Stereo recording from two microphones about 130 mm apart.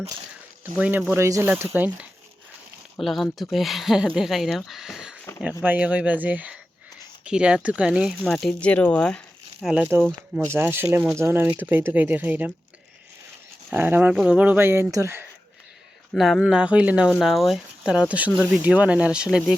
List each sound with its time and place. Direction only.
0.6 s speech: 15° right (ahead or behind)
3.0 s speech: centre (ahead or behind)
8.2 s speech: 5° left (ahead or behind)
9.9 s speech: 15° right (ahead or behind)
13.7 s speech: 15° right (ahead or behind)
16.1 s speech: centre (ahead or behind)